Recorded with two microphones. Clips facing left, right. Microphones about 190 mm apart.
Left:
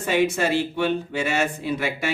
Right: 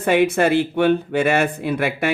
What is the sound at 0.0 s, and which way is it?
Speech, 55° right (ahead or behind).